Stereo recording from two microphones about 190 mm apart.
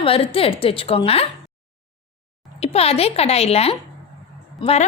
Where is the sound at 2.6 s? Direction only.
30° left (ahead or behind).